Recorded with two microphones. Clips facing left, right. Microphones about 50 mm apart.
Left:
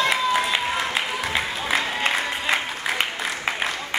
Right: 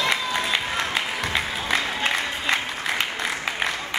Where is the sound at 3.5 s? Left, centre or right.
Centre.